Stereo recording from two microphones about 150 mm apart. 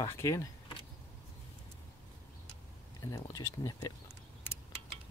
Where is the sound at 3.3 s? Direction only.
25° left (ahead or behind).